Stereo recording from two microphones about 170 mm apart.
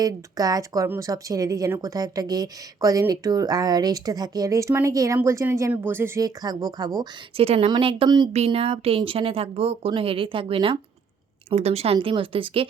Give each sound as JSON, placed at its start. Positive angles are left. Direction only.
{"t": 0.0, "sound": "speech", "side_deg": -20}
{"t": 7.4, "sound": "speech", "side_deg": -35}
{"t": 8.3, "sound": "speech", "side_deg": -40}